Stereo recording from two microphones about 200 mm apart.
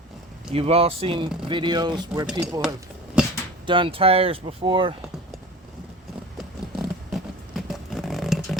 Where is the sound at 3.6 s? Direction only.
25° right (ahead or behind).